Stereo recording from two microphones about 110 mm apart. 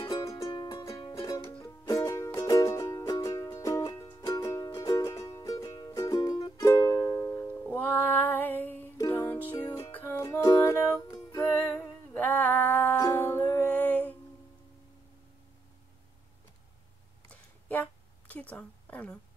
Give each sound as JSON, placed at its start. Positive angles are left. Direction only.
{"t": 0.0, "sound": "music", "side_deg": 30}
{"t": 7.6, "sound": "music", "side_deg": 10}
{"t": 10.4, "sound": "music", "side_deg": 30}
{"t": 17.3, "sound": "a sound", "side_deg": 15}